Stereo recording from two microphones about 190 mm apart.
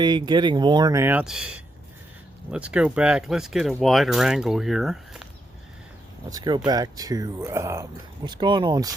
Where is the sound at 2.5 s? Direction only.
5° right (ahead or behind).